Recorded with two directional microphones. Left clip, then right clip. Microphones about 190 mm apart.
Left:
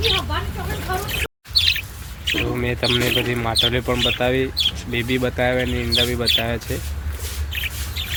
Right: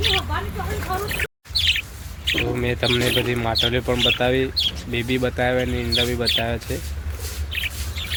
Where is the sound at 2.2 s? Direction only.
15° right (ahead or behind).